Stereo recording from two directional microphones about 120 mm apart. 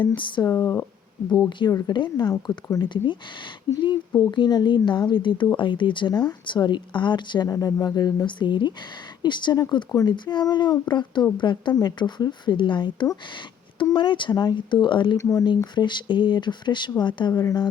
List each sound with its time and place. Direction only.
0.2 s speech: 40° left (ahead or behind)
0.4 s speech: 25° left (ahead or behind)
1.3 s speech: 40° left (ahead or behind)
4.2 s speech: 40° left (ahead or behind)
15.2 s speech: 30° left (ahead or behind)